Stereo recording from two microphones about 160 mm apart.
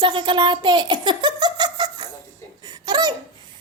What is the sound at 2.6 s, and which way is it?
Belly laugh, 25° right (ahead or behind).